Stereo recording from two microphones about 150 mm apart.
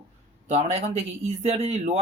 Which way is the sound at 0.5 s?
45° right (ahead or behind).